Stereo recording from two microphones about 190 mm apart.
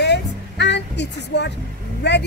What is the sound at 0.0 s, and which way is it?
Music, 65° left (ahead or behind).